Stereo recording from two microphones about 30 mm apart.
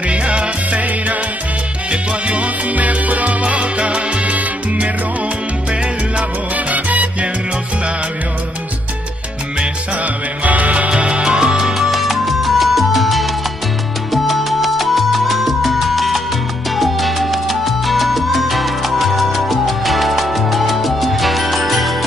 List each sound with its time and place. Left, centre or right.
0.1 s music: right
1.9 s music: right
3.4 s salsa music: right
6.5 s salsa music: right
10.4 s music: right
11.0 s music: right
11.2 s music: right
11.9 s music: centre
16.7 s salsa music: centre